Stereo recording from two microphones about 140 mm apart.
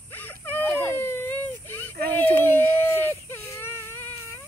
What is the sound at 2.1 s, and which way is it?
Baby cry, 15° left (ahead or behind).